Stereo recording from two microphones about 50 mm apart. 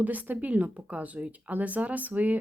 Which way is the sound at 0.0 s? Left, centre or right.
Right.